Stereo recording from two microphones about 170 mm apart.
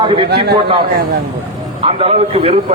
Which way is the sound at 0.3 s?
75° right (ahead or behind).